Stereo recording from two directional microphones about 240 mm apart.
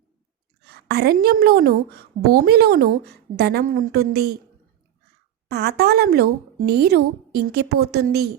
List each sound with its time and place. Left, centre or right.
0.6 s a woman's voice: right
5.5 s a woman's voice: right